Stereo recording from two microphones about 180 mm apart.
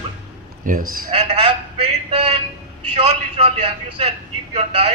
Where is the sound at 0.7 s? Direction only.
50° right (ahead or behind).